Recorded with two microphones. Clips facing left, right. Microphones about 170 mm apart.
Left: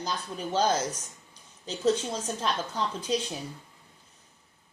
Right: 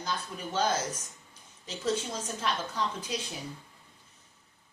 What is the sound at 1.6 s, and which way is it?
A woman's voice, 35° left (ahead or behind).